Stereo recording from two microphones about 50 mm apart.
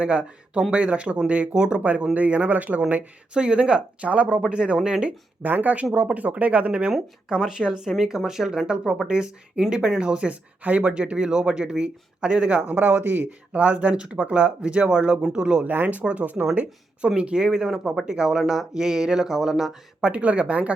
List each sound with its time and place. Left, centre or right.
0.0 s speech: right
3.3 s speech: right
5.4 s speech: right; by 8.8 s centre
8.8 s speech: centre
9.0 s speech: centre
15.6 s speech: right
17.2 s speech: centre
20.0 s speech: right